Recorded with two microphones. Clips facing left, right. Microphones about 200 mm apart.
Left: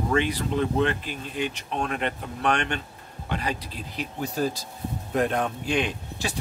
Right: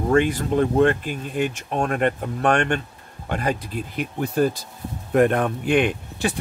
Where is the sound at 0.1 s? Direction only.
50° right (ahead or behind).